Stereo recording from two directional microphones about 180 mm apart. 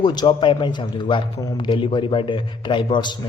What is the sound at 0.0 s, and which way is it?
A man's voice, 25° left (ahead or behind).